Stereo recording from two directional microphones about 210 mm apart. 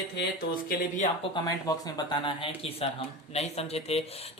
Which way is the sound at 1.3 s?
20° left (ahead or behind).